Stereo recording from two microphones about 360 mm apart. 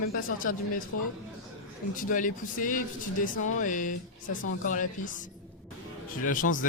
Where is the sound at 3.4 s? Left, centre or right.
Left.